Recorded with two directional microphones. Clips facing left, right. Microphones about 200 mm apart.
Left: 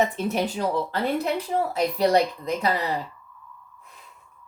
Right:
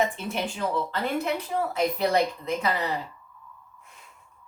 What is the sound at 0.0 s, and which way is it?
Speech, 40° left (ahead or behind).